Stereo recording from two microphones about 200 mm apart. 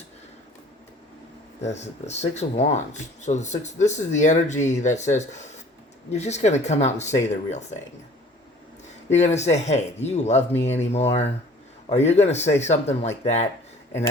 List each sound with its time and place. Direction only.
1.6 s speech: 35° left (ahead or behind)
9.1 s speech: 35° left (ahead or behind)